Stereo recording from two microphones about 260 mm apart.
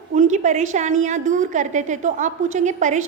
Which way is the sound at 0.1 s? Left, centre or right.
Right.